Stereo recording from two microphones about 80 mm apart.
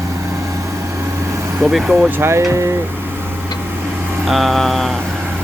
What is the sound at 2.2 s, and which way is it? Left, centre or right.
Speech, right.